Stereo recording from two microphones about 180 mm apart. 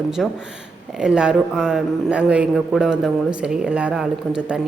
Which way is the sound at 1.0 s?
5° right (ahead or behind).